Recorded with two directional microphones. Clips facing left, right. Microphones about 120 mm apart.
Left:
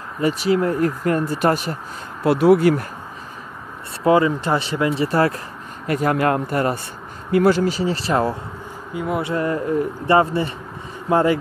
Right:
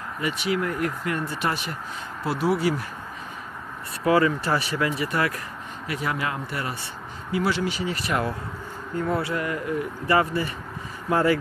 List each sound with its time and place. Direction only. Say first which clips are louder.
0.2 s speech: left 8 dB; 35° left (ahead or behind)
2.2 s speech: left 9 dB; 65° left (ahead or behind)
4.0 s speech: left 4 dB; 20° left (ahead or behind)
5.9 s speech: left 10 dB; 50° left (ahead or behind); by 8.4 s 30° left (ahead or behind)
8.9 s speech: left 2 dB; 15° left (ahead or behind)
9.3 s speech: left 6 dB; 30° left (ahead or behind)